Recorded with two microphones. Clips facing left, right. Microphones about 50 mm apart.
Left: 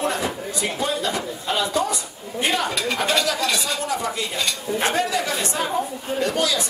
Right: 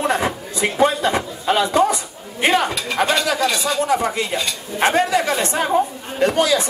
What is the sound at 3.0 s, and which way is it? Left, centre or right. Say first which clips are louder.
Speech: right 6 dB; centre.